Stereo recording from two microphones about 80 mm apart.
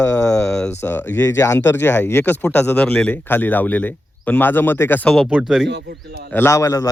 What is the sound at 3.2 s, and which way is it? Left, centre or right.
Speech, left.